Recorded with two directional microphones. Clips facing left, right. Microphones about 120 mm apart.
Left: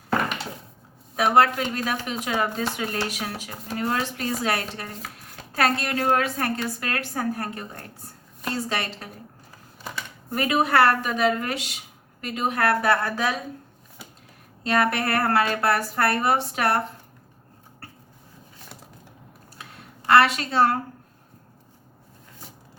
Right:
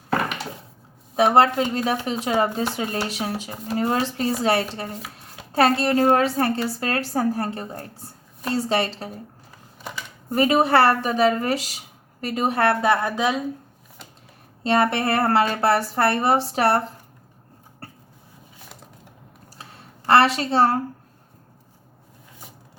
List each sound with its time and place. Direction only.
1.1 s a woman's voice: 25° right (ahead or behind)
10.3 s a woman's voice: 30° right (ahead or behind)
14.6 s a woman's voice: 25° right (ahead or behind)
19.5 s a sound: 30° right (ahead or behind)